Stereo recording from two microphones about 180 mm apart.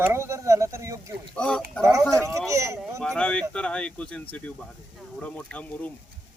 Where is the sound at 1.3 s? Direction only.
5° left (ahead or behind).